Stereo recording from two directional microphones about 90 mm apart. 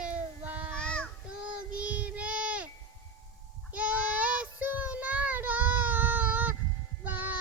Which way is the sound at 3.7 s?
15° right (ahead or behind).